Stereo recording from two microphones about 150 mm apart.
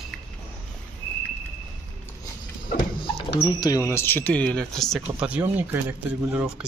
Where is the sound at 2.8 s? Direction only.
35° left (ahead or behind).